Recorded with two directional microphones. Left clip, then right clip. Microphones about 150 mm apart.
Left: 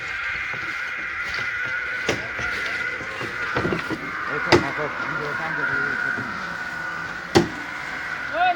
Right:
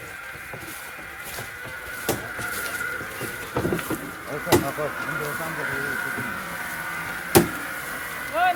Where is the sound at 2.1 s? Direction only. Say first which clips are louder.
Left 4 dB; 35° right (ahead or behind).